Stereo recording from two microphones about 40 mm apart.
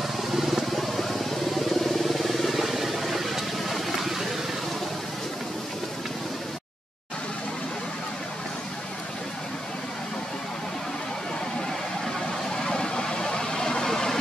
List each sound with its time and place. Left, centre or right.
0.3 s vehicle: centre
12.6 s vehicle: centre